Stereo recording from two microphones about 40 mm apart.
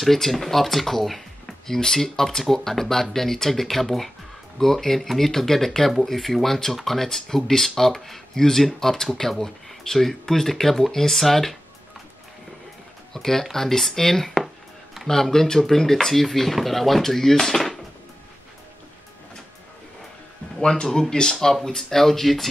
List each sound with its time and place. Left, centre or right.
0.0 s speech: centre
13.1 s speech: centre
20.6 s speech: centre